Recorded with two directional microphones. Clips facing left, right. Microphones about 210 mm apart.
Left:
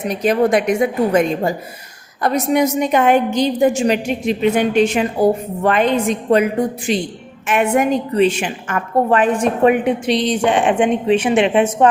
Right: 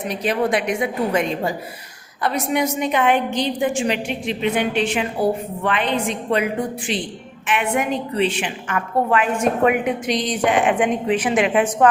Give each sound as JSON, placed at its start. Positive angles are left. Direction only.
{"t": 0.1, "sound": "a woman's voice", "side_deg": 45}